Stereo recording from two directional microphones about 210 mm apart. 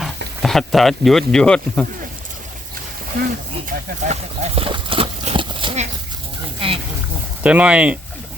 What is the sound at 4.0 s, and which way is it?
Horse, 30° right (ahead or behind).